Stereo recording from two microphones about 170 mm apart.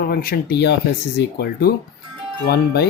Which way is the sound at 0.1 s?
60° left (ahead or behind).